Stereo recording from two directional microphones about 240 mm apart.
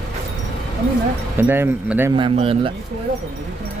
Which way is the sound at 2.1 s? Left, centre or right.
Right.